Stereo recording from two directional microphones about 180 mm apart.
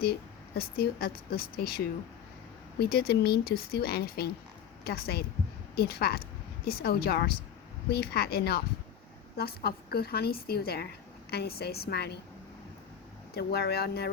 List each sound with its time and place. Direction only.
0.0 s speech: 60° left (ahead or behind)
13.3 s speech: 65° left (ahead or behind)